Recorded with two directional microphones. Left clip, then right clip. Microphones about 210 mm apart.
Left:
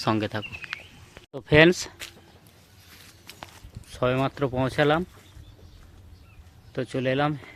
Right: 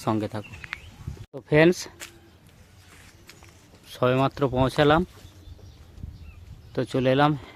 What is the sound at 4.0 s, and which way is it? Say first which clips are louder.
Speech: right 2 dB; 15° right (ahead or behind).